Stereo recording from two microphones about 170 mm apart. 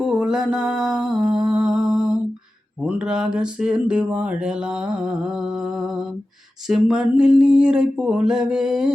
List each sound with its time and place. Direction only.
0.0 s mantra: 5° right (ahead or behind)
2.8 s speech: 5° right (ahead or behind)